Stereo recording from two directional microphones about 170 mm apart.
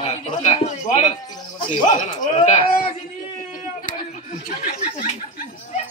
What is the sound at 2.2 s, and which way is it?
Speech, 40° left (ahead or behind).